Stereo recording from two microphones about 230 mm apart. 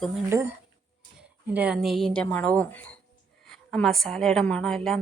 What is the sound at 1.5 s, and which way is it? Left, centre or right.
A woman's voice, centre.